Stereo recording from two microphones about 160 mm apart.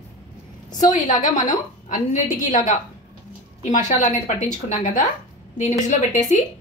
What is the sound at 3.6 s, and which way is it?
A woman's voice, 50° left (ahead or behind).